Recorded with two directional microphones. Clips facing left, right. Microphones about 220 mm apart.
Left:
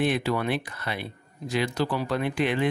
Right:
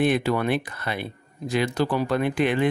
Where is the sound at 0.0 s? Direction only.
50° right (ahead or behind).